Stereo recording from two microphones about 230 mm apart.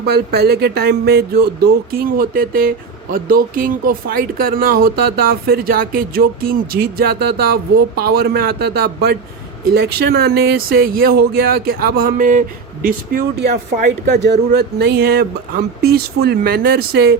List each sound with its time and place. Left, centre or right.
0.0 s speech: right